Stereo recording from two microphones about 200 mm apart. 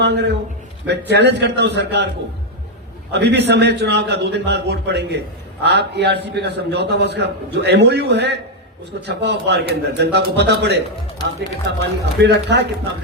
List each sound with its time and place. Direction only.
0.0 s a man's voice: 55° right (ahead or behind)
3.1 s a man's voice: 60° right (ahead or behind)